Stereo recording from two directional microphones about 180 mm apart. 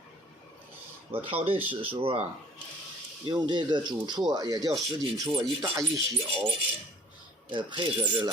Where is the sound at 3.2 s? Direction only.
25° right (ahead or behind).